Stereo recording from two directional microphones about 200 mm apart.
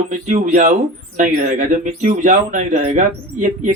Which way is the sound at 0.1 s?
40° right (ahead or behind).